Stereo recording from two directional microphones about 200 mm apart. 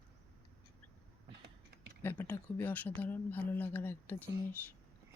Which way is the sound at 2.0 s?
10° left (ahead or behind).